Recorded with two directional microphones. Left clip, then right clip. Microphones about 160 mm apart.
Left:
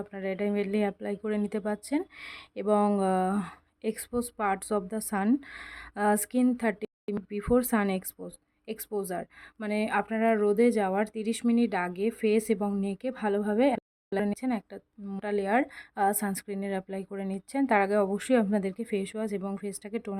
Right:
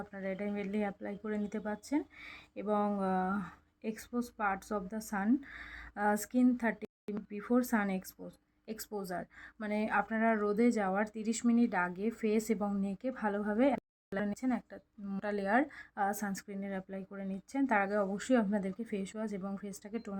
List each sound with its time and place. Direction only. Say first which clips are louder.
0.1 s speech: left 9 dB; 40° left (ahead or behind)
6.8 s a sound: left 8 dB; centre (ahead or behind)
7.3 s speech: left 7 dB; 40° left (ahead or behind)